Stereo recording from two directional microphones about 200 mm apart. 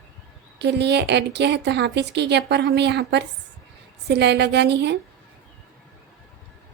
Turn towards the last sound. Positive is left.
turn(degrees=-60)  # may be behind; listen again after turning